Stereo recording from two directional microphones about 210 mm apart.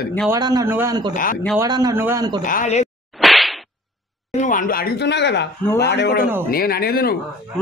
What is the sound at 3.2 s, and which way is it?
Whip, centre (ahead or behind).